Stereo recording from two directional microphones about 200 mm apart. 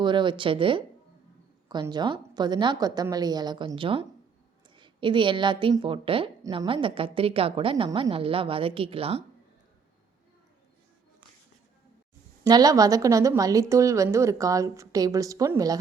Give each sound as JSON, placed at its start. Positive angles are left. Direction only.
{"t": 0.0, "sound": "a woman's voice", "side_deg": -25}
{"t": 12.5, "sound": "a woman's voice", "side_deg": -20}